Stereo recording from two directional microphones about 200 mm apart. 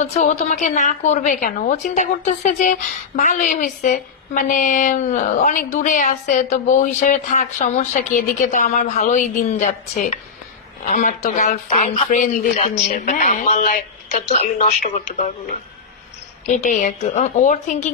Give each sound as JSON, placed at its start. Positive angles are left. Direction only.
{"t": 0.0, "sound": "a woman's voice", "side_deg": 35}
{"t": 16.4, "sound": "a woman's voice", "side_deg": 40}